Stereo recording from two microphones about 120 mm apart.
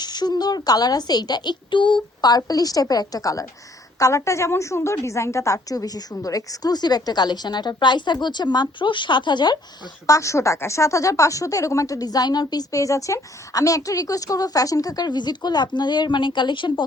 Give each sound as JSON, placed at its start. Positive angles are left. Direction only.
{"t": 0.0, "sound": "a woman's voice", "side_deg": 35}
{"t": 10.1, "sound": "speech", "side_deg": 25}